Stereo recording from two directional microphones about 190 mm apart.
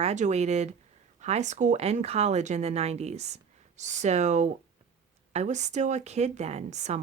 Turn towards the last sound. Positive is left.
turn(degrees=-35)  # may be behind; listen again after turning